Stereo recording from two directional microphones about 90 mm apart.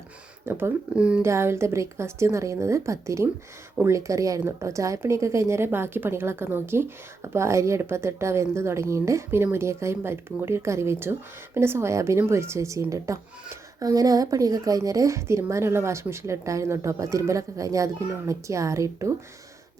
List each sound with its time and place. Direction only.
0.4 s speech: 25° right (ahead or behind)
0.9 s speech: 10° right (ahead or behind)
1.2 s a woman's voice: 30° right (ahead or behind)